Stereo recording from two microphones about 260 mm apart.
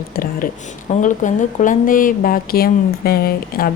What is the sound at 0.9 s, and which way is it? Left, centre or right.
Speech, left.